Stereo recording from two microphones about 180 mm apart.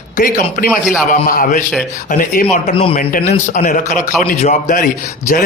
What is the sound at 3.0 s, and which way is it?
A man's voice, 50° left (ahead or behind).